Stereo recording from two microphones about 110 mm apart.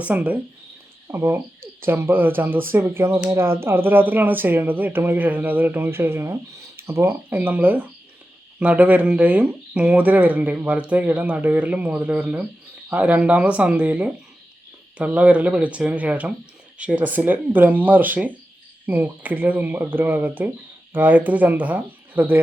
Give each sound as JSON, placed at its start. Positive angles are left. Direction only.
{"t": 0.0, "sound": "speech", "side_deg": -15}